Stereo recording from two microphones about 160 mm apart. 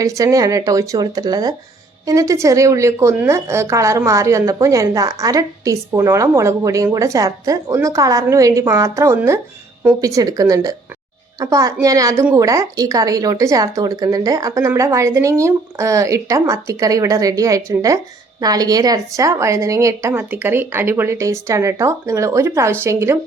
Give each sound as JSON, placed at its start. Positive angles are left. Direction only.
{"t": 0.0, "sound": "speech", "side_deg": -20}